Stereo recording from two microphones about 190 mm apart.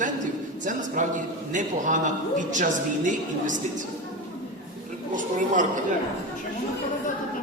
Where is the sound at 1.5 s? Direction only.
40° right (ahead or behind).